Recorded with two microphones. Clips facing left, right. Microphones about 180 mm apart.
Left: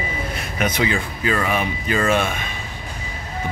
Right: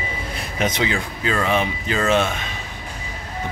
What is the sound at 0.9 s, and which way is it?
Speech, 10° left (ahead or behind).